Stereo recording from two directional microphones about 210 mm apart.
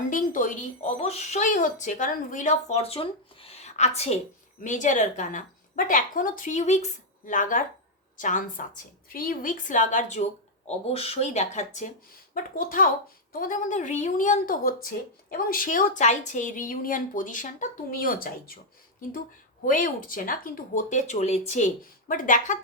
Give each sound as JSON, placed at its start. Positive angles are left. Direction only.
{"t": 0.1, "sound": "speech", "side_deg": 40}
{"t": 19.6, "sound": "speech", "side_deg": 40}